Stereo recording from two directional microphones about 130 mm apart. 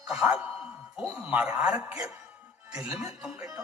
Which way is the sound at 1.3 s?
5° right (ahead or behind).